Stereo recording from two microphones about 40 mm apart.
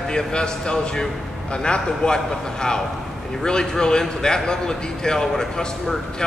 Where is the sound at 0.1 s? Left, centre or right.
Left.